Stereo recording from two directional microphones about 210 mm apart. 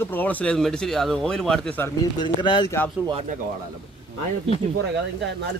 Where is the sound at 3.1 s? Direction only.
30° right (ahead or behind).